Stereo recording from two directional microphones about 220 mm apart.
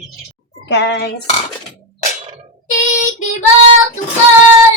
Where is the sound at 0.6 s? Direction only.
50° left (ahead or behind).